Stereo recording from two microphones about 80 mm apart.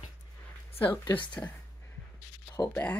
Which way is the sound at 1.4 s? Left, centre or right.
Left.